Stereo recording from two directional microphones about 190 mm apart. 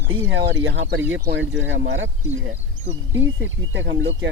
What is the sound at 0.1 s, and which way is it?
Speech, 90° right.